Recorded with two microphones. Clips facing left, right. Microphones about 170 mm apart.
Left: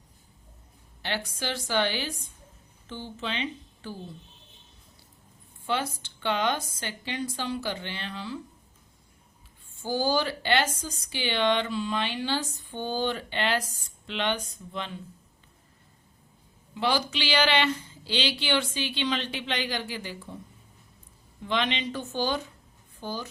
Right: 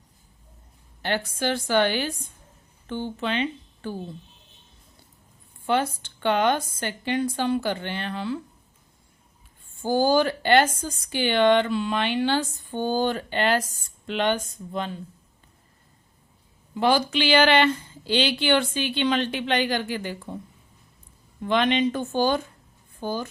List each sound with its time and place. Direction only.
1.0 s a woman's voice: 50° right (ahead or behind)
5.6 s a woman's voice: 50° right (ahead or behind)
9.8 s a woman's voice: 50° right (ahead or behind)
16.7 s a woman's voice: 50° right (ahead or behind)
21.4 s a woman's voice: 50° right (ahead or behind)